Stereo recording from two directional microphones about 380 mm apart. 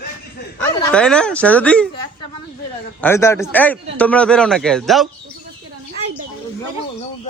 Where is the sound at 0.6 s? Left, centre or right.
Centre.